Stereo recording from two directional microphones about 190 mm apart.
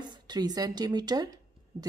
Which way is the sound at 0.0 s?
20° right (ahead or behind).